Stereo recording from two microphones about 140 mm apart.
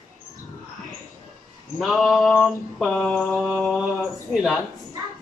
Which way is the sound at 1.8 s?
Centre (ahead or behind).